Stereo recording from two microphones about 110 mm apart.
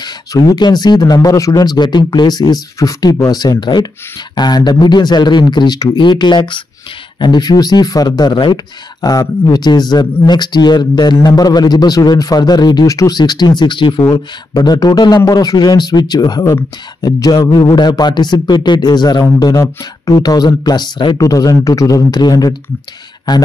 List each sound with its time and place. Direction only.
0.0 s speech: 35° left (ahead or behind)